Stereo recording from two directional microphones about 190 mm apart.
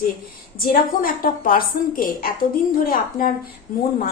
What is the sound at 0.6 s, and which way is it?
A woman's voice, 45° left (ahead or behind).